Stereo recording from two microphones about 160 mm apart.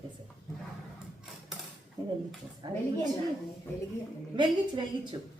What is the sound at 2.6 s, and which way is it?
Speech, 25° right (ahead or behind).